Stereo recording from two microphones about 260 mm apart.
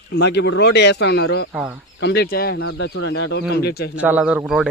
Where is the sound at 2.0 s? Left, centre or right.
Left.